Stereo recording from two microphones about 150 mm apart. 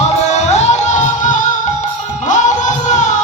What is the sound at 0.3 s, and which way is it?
Music, 50° left (ahead or behind).